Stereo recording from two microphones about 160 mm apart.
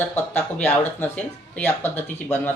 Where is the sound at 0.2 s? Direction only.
10° left (ahead or behind).